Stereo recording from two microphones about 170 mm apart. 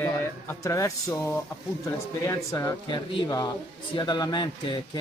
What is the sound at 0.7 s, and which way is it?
Speech, 20° left (ahead or behind).